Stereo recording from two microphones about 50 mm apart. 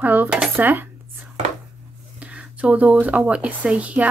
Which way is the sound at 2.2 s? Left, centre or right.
Right.